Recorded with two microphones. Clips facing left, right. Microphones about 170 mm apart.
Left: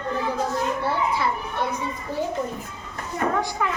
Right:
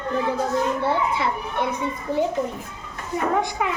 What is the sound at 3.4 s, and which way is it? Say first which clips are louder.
Speech: right 2 dB; 15° right (ahead or behind).